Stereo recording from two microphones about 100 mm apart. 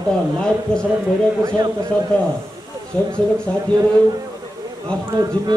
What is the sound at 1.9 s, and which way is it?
Speech, 15° left (ahead or behind).